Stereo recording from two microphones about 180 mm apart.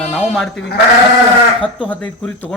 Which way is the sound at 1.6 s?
5° left (ahead or behind).